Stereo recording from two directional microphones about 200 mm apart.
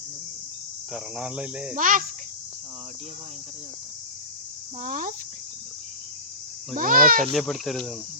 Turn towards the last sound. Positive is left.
turn(degrees=0)  # may be behind; listen again after turning